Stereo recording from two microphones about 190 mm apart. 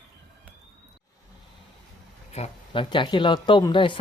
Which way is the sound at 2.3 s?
30° left (ahead or behind).